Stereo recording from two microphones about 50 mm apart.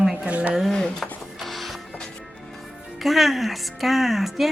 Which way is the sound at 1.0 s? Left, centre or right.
Centre.